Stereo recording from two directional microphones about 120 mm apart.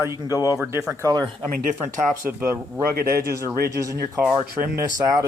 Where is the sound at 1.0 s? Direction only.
30° right (ahead or behind).